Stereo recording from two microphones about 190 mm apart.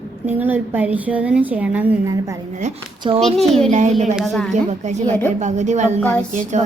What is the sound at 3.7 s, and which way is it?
Speech, 40° right (ahead or behind).